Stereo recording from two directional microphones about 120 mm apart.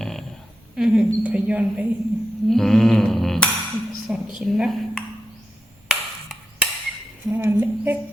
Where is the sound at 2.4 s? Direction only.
5° left (ahead or behind).